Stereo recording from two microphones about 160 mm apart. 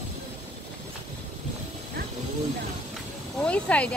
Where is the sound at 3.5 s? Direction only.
10° left (ahead or behind).